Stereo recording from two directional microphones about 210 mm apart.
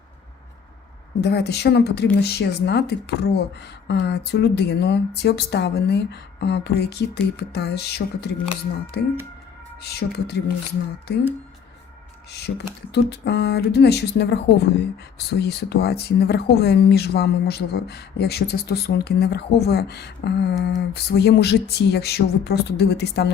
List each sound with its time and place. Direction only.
1.2 s speech: 50° left (ahead or behind)
12.4 s speech: 50° left (ahead or behind)